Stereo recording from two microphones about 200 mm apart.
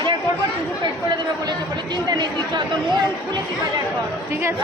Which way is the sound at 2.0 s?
20° right (ahead or behind).